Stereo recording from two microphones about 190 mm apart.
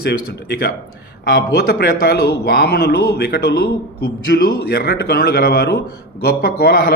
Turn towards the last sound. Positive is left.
turn(degrees=55)  # may be behind; listen again after turning